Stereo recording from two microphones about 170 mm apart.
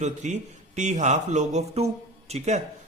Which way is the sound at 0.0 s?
45° right (ahead or behind).